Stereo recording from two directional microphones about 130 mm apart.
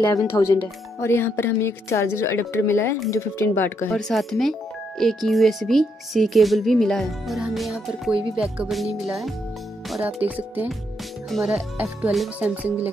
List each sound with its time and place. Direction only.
0.0 s speech: 30° left (ahead or behind)
3.9 s speech: centre (ahead or behind)
10.2 s speech: 10° right (ahead or behind)
11.2 s speech: centre (ahead or behind)